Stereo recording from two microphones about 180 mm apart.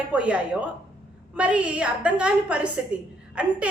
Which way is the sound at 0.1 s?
5° right (ahead or behind).